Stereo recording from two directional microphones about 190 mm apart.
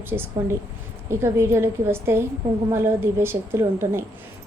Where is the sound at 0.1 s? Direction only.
15° right (ahead or behind).